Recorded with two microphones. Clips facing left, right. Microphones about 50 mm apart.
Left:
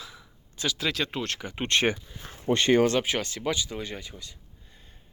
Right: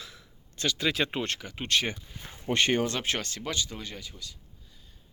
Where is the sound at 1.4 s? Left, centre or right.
Centre.